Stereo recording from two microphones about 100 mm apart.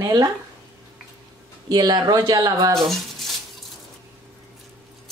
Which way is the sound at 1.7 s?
45° right (ahead or behind).